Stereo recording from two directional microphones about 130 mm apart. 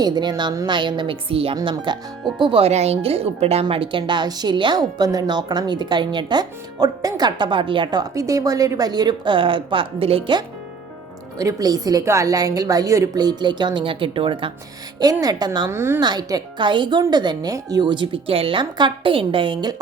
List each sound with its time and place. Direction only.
0.0 s a woman's voice: 30° right (ahead or behind)
1.5 s a woman's voice: 35° right (ahead or behind)
11.3 s a woman's voice: 25° right (ahead or behind)
14.9 s a woman's voice: 30° right (ahead or behind)
15.7 s a woman's voice: 20° right (ahead or behind)
16.0 s a woman's voice: 30° right (ahead or behind)